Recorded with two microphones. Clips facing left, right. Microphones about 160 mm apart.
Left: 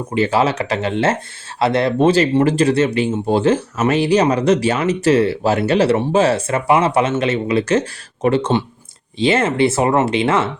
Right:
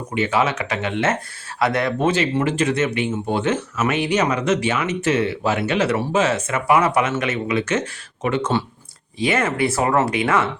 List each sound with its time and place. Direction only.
0.1 s speech: 35° left (ahead or behind)